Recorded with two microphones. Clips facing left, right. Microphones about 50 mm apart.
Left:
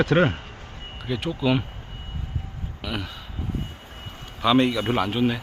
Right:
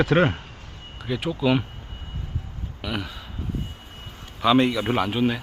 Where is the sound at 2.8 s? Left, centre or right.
Centre.